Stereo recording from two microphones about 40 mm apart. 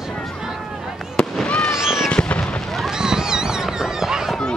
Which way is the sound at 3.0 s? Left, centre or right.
Centre.